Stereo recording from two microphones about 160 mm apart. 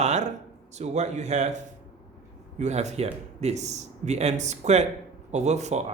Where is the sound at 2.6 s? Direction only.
45° right (ahead or behind).